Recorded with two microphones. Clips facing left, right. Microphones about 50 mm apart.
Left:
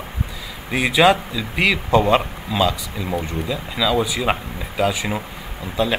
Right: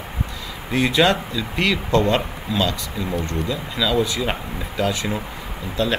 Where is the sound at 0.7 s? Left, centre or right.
Centre.